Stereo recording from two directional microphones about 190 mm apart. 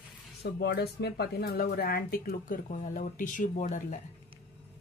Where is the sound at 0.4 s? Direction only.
60° left (ahead or behind); by 4.0 s 40° left (ahead or behind).